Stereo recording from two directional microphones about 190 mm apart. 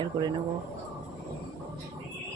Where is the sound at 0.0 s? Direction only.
25° right (ahead or behind).